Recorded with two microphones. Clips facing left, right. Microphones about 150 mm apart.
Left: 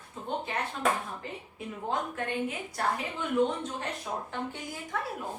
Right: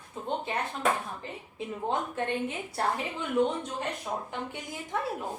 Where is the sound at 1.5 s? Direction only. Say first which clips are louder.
Right 2 dB; 25° right (ahead or behind).